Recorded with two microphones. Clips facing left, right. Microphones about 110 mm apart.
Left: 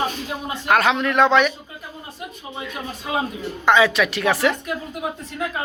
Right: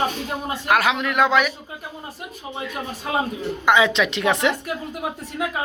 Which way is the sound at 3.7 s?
20° right (ahead or behind).